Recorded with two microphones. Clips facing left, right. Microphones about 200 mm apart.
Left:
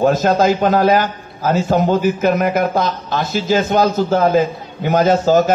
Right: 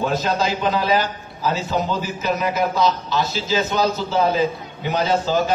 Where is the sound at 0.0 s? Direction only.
50° left (ahead or behind).